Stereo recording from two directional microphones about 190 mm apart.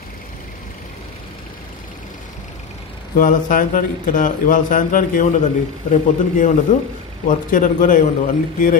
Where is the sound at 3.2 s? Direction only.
45° left (ahead or behind).